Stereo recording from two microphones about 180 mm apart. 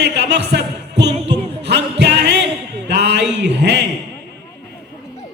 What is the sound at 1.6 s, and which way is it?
Music, 70° right (ahead or behind).